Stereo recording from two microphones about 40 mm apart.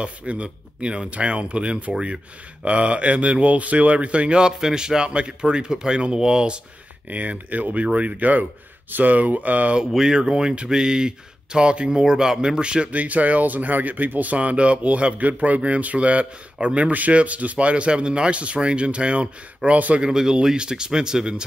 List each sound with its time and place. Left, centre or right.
0.0 s a man's voice: right
7.1 s speech: right
9.8 s speech: centre
12.9 s speech: right
20.0 s speech: centre